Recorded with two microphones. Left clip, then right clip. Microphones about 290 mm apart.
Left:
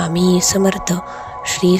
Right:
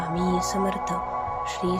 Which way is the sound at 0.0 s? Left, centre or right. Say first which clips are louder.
Left 9 dB; left.